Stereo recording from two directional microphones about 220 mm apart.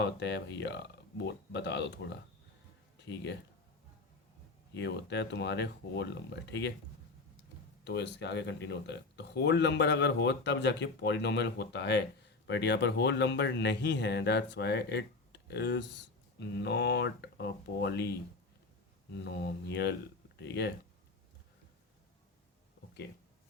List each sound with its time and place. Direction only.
0.0 s speech: 50° left (ahead or behind)
4.7 s speech: 50° left (ahead or behind)
7.9 s speech: 50° left (ahead or behind)
19.2 s speech: 50° left (ahead or behind)